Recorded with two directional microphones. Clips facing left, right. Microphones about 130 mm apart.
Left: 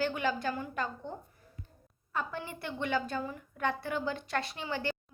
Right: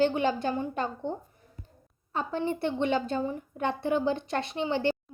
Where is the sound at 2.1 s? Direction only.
25° right (ahead or behind).